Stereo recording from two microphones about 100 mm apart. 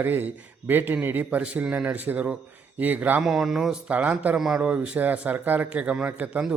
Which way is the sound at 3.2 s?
5° right (ahead or behind).